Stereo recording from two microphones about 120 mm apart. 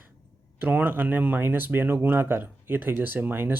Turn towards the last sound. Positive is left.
turn(degrees=-15)  # may be behind; listen again after turning